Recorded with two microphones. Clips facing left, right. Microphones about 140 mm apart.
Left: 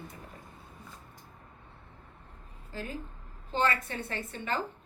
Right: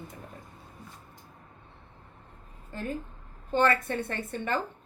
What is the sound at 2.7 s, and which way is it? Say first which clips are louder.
A woman's voice: right 4 dB; 55° right (ahead or behind).